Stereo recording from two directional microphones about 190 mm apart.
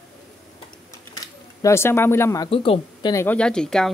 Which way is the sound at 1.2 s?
15° left (ahead or behind).